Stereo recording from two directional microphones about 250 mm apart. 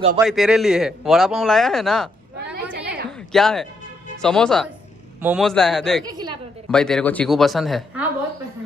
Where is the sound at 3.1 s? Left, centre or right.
Centre.